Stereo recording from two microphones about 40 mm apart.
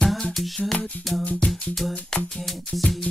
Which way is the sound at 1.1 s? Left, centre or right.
Centre.